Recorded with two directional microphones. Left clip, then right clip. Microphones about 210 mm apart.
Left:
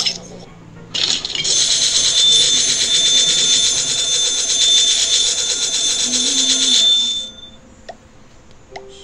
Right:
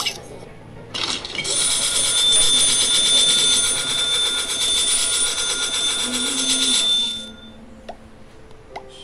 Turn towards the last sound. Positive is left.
turn(degrees=-20)  # may be behind; listen again after turning